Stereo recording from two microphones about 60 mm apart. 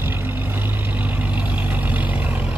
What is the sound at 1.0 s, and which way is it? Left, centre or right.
Vehicle, right.